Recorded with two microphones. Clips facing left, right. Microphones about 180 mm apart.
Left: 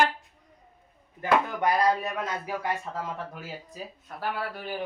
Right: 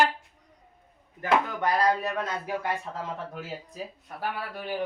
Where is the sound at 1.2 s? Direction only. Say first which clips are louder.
Left 1 dB; 15° left (ahead or behind).